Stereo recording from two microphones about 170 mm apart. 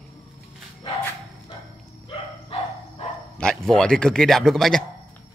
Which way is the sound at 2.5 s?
35° left (ahead or behind).